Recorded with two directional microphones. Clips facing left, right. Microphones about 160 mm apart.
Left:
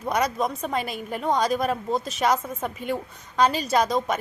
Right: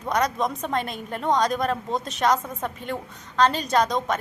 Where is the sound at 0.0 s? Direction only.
5° left (ahead or behind).